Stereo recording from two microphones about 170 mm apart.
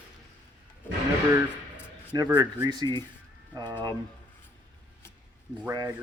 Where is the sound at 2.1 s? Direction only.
25° right (ahead or behind).